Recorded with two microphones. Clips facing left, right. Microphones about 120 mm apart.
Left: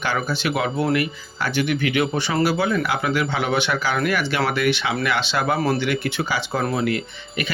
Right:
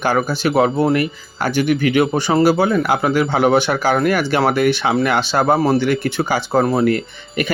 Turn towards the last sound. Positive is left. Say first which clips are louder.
# right 6 dB
turn(degrees=-45)  # may be behind; listen again after turning